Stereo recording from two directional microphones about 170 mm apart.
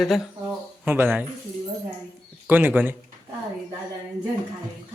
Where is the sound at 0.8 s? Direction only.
10° right (ahead or behind).